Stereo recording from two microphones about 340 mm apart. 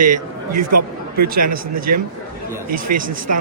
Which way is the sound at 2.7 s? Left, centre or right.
Right.